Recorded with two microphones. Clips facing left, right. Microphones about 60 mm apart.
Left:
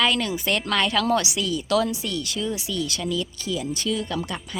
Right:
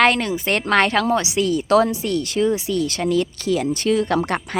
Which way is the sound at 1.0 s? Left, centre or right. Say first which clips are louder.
Right 2 dB; right.